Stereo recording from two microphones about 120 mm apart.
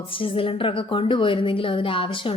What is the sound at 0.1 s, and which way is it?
A woman's voice, 45° left (ahead or behind).